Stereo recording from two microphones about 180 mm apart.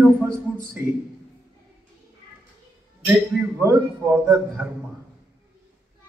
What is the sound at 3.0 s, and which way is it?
A man's voice, 10° right (ahead or behind).